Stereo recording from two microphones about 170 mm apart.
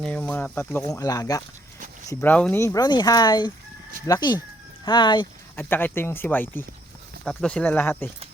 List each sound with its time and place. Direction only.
0.0 s speech: 10° left (ahead or behind)
2.0 s speech: 10° left (ahead or behind); by 5.3 s 25° left (ahead or behind)
5.5 s speech: 10° left (ahead or behind)